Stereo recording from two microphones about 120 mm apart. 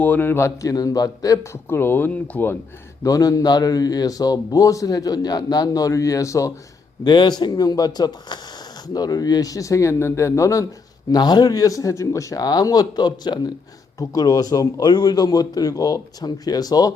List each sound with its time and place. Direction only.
0.0 s speech: 15° left (ahead or behind)
3.0 s a man's voice: 30° left (ahead or behind)
7.0 s a man's voice: 35° left (ahead or behind)